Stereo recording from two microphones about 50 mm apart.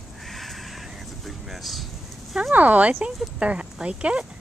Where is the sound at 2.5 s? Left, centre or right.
Right.